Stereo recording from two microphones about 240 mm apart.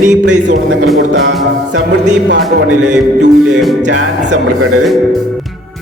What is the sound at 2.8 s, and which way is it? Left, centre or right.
Speech, right.